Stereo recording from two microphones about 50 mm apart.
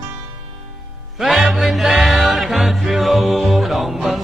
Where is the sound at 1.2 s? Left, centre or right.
Centre.